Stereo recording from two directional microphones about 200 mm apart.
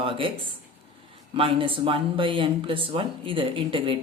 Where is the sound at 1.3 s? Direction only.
25° right (ahead or behind).